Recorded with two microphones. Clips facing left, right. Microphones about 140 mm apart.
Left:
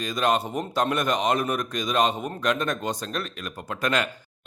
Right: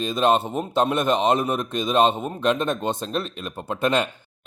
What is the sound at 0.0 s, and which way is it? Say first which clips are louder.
Speech: right 4 dB; 25° right (ahead or behind).